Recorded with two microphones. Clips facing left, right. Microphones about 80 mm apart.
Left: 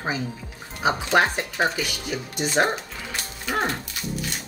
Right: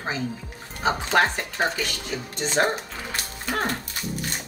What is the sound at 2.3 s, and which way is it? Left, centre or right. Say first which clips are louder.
Speech: left 1 dB; centre.